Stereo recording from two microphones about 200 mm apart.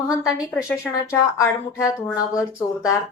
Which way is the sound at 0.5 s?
15° left (ahead or behind).